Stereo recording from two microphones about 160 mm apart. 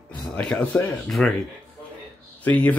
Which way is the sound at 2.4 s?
10° left (ahead or behind).